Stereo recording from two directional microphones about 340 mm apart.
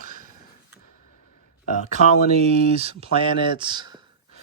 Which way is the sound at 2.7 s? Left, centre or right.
Centre.